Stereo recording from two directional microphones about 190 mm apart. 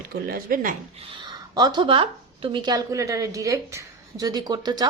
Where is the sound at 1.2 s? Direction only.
20° right (ahead or behind).